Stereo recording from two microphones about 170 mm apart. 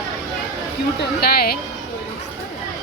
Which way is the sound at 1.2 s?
65° left (ahead or behind).